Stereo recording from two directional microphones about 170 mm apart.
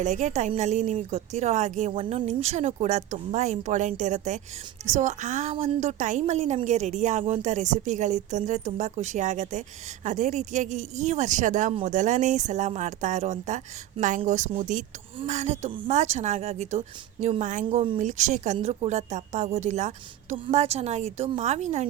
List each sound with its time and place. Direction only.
0.0 s a woman's voice: 45° right (ahead or behind)